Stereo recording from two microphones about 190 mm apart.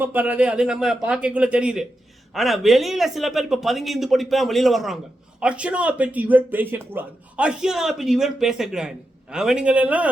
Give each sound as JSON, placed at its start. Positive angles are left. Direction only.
{"t": 0.0, "sound": "speech", "side_deg": -10}